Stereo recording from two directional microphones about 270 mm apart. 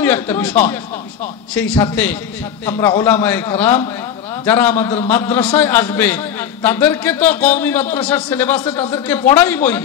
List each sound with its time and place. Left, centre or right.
0.0 s a man's voice: centre